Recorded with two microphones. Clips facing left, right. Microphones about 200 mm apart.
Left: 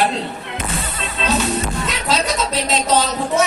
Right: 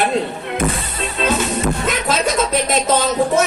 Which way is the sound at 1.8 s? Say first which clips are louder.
Right 2 dB; 50° right (ahead or behind).